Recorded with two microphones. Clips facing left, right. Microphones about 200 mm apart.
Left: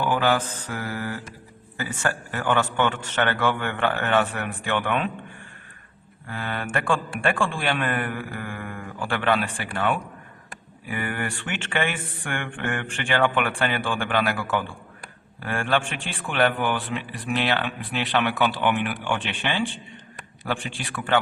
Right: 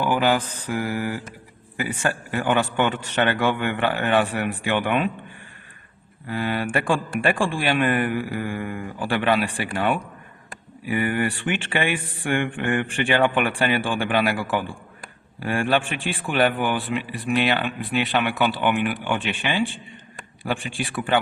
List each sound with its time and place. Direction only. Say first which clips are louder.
0.0 s a man's voice: right 2 dB; 15° right (ahead or behind)
6.3 s a man's voice: right 5 dB; 15° right (ahead or behind)
15.4 s a man's voice: right 3 dB; 15° right (ahead or behind)
16.8 s speech: right 4 dB; centre (ahead or behind)
19.1 s a man's voice: right 2 dB; 10° right (ahead or behind)
20.7 s a man's voice: right 2 dB; 10° right (ahead or behind)